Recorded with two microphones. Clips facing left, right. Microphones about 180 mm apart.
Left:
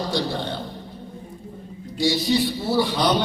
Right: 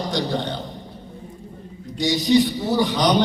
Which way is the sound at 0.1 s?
20° right (ahead or behind).